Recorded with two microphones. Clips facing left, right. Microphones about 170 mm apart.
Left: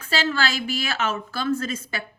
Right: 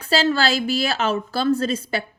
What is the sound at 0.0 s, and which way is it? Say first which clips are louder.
A woman's voice: right 5 dB; 35° right (ahead or behind).